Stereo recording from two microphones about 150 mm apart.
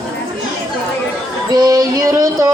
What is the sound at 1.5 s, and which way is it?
Music, 25° right (ahead or behind).